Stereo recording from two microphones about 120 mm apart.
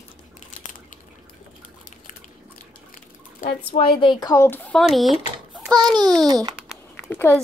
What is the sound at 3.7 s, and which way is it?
Speech, 45° left (ahead or behind).